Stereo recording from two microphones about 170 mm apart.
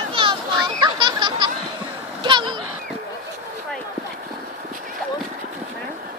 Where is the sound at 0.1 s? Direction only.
30° right (ahead or behind).